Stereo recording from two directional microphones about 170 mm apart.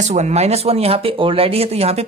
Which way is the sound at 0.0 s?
40° right (ahead or behind).